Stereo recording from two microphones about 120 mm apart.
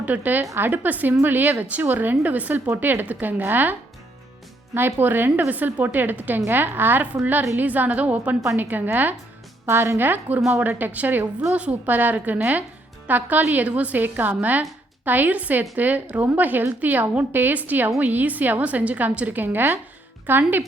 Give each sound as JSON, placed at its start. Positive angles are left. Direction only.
{"t": 0.0, "sound": "a woman's voice", "side_deg": -15}